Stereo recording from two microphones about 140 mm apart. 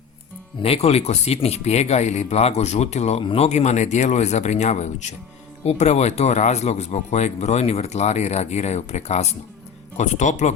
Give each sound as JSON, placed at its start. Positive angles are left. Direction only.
{"t": 0.6, "sound": "speech", "side_deg": 45}